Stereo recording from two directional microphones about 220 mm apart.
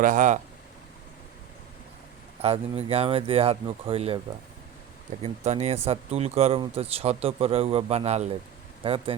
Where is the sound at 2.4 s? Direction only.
25° right (ahead or behind).